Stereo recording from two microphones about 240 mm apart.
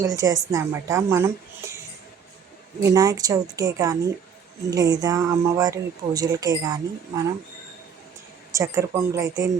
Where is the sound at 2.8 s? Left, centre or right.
Centre.